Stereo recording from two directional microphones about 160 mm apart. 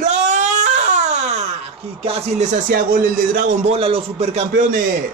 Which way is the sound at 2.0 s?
45° right (ahead or behind).